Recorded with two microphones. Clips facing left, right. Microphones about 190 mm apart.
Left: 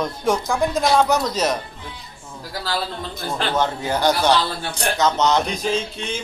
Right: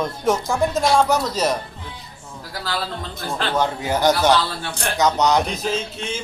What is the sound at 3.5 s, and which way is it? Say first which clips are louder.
A man's voice: right 1 dB; 15° right (ahead or behind).